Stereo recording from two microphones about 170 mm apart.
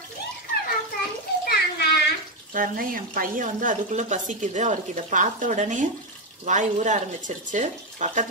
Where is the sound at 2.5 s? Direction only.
55° right (ahead or behind).